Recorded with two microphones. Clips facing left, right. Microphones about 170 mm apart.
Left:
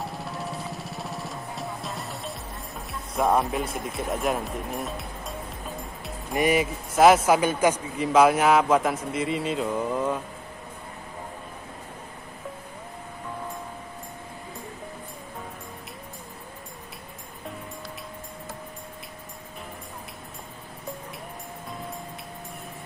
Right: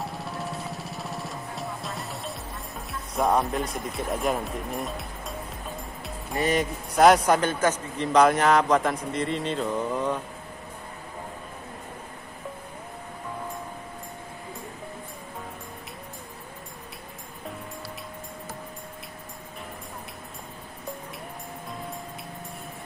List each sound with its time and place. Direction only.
0.0 s music: centre (ahead or behind)
6.3 s speech: 10° left (ahead or behind)